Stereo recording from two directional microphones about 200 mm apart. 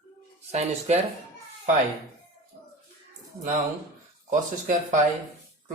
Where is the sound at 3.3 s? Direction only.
15° right (ahead or behind).